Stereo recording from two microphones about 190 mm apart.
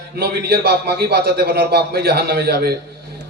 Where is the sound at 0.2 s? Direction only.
60° right (ahead or behind).